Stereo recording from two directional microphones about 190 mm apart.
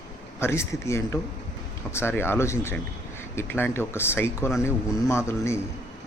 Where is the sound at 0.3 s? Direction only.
15° left (ahead or behind).